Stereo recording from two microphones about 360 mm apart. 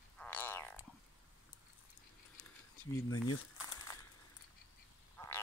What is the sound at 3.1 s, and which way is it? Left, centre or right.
Speech, left.